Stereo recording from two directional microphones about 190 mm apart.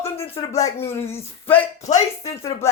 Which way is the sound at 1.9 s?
35° left (ahead or behind).